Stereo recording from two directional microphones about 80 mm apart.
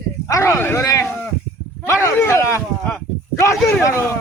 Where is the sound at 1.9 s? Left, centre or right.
Left.